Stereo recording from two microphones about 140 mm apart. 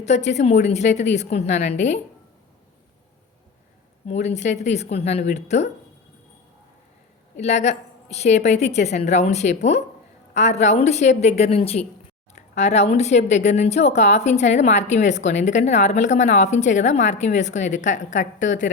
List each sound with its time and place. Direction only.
0.0 s speech: 50° left (ahead or behind)
4.0 s a woman's voice: 55° left (ahead or behind)
7.3 s a woman's voice: 55° left (ahead or behind)